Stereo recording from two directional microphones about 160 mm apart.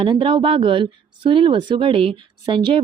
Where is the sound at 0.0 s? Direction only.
30° right (ahead or behind).